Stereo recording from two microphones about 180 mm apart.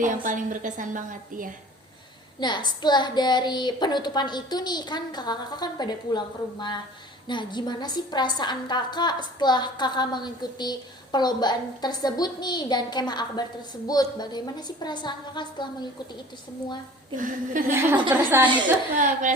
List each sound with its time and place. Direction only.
0.0 s a woman's voice: 45° right (ahead or behind)
2.4 s a woman's voice: 25° left (ahead or behind)
17.2 s a woman's voice: 45° right (ahead or behind)
17.7 s a woman's voice: 10° right (ahead or behind)
18.9 s a woman's voice: 45° right (ahead or behind)